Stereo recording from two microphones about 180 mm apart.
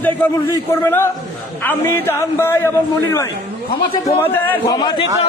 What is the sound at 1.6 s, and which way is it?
Speech, 10° left (ahead or behind).